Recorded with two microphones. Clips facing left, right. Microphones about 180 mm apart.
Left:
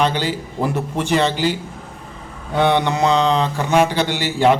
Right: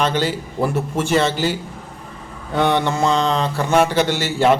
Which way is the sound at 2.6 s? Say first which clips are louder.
Left 1 dB; 15° left (ahead or behind).